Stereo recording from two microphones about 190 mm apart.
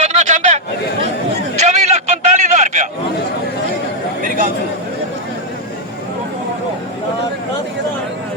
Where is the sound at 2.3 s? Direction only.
40° right (ahead or behind).